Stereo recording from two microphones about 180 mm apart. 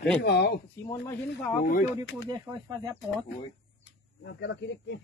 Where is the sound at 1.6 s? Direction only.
50° left (ahead or behind).